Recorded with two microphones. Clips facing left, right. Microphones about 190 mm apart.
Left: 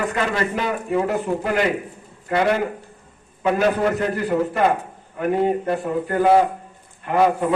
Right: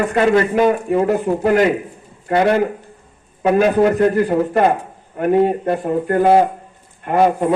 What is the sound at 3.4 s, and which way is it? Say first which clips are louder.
A man's voice: right 5 dB; 45° right (ahead or behind).